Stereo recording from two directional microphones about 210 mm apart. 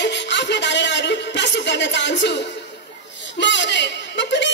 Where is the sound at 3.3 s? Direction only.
60° left (ahead or behind).